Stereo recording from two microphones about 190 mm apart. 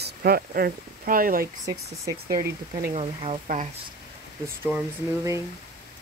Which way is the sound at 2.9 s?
30° right (ahead or behind).